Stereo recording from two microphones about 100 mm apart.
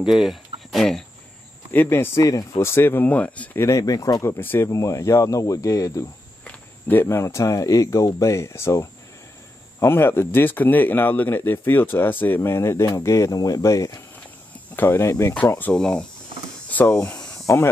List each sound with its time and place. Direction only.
0.0 s speech: 5° right (ahead or behind)
1.7 s speech: 20° left (ahead or behind)
2.2 s speech: 40° left (ahead or behind)
2.6 s speech: 25° left (ahead or behind)
3.6 s speech: 35° left (ahead or behind)
4.6 s speech: 35° left (ahead or behind)
6.4 s speech: 20° left (ahead or behind)
14.8 s speech: 25° left (ahead or behind)
15.3 s speech: 15° left (ahead or behind)
16.6 s a sound: 15° left (ahead or behind)